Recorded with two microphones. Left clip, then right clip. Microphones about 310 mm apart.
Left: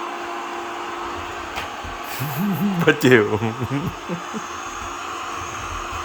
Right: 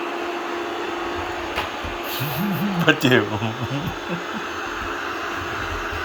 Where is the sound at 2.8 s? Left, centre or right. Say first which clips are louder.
Left 2 dB; centre.